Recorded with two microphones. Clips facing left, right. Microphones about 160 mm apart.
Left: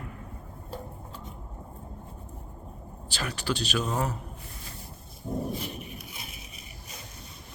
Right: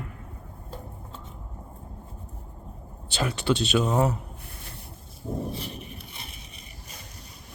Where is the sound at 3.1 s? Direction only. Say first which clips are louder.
Right 6 dB; 25° right (ahead or behind).